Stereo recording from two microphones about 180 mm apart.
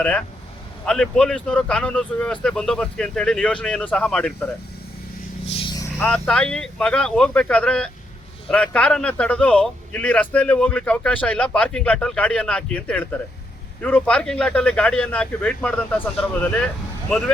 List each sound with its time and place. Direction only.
0.9 s speech: 5° left (ahead or behind)
5.5 s vehicle: 25° left (ahead or behind)
6.0 s a man's voice: 5° left (ahead or behind)